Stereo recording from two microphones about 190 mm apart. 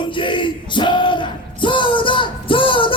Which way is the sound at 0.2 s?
25° left (ahead or behind).